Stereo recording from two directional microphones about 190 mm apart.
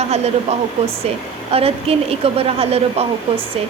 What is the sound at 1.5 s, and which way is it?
A woman's voice, 30° right (ahead or behind).